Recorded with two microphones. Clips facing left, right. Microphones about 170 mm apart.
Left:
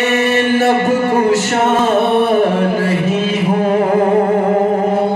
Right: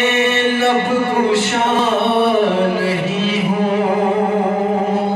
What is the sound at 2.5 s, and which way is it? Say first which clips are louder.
Music: left 1 dB; 50° left (ahead or behind).